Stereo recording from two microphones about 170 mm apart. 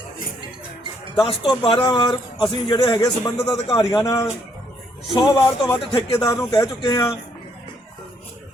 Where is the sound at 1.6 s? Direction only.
25° left (ahead or behind).